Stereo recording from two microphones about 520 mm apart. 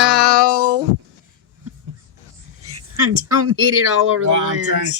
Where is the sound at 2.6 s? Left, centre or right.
Right.